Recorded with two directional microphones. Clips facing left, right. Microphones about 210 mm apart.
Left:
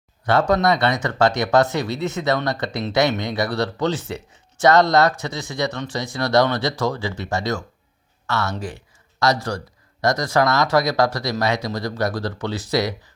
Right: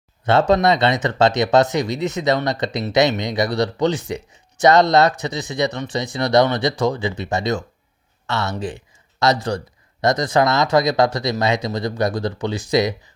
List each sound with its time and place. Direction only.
0.3 s speech: 25° right (ahead or behind)